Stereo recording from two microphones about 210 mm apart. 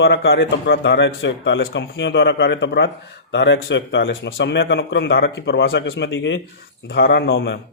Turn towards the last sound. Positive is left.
turn(degrees=50)  # may be behind; listen again after turning